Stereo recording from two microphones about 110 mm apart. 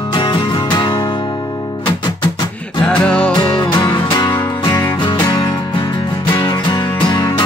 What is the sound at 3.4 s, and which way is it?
Music, 40° left (ahead or behind).